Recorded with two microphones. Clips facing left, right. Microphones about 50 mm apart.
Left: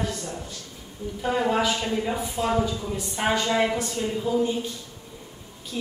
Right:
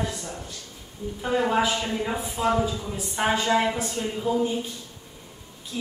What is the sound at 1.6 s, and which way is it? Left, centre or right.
A woman's voice, centre.